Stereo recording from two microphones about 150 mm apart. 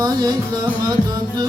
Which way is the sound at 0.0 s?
25° right (ahead or behind).